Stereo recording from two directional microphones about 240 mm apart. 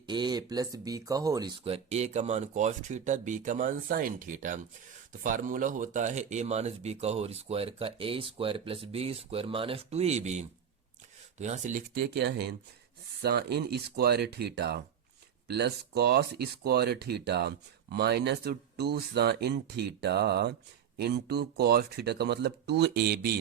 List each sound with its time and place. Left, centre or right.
0.0 s speech: centre; by 23.3 s right